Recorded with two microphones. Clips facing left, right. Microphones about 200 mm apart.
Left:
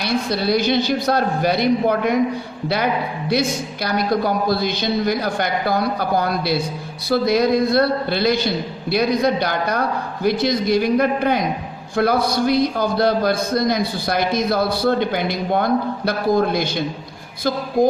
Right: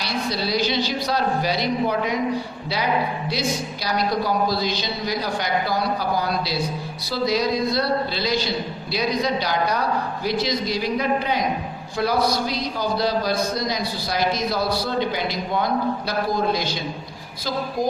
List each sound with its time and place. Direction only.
0.0 s a man's voice: 55° left (ahead or behind)